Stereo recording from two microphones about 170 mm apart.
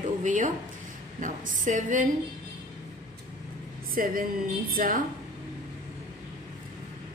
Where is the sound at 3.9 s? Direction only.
55° right (ahead or behind).